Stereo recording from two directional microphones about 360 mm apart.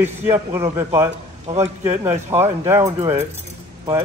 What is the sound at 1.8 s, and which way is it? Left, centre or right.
Speech, centre.